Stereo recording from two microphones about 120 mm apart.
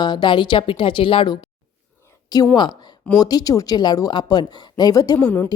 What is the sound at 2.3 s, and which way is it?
A woman's voice, 35° left (ahead or behind).